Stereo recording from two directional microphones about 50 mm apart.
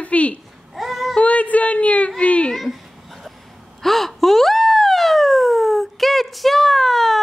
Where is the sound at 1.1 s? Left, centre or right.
Left.